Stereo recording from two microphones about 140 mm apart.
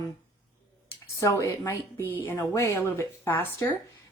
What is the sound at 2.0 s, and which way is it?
Speech, 15° right (ahead or behind).